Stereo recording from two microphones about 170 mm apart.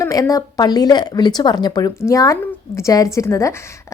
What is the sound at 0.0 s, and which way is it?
Speech, 20° left (ahead or behind).